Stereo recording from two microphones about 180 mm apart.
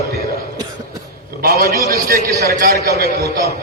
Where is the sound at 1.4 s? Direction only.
55° right (ahead or behind).